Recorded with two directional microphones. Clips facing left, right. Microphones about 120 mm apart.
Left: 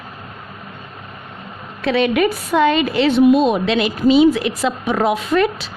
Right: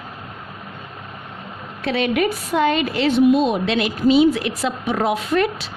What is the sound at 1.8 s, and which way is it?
A woman's voice, 90° left.